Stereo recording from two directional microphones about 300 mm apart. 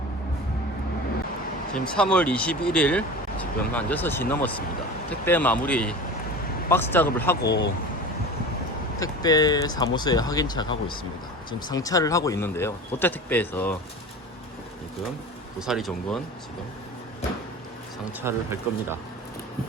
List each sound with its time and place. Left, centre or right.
1.8 s speech: centre
7.4 s speech: left
9.0 s speech: centre
15.5 s speech: centre
18.2 s speech: centre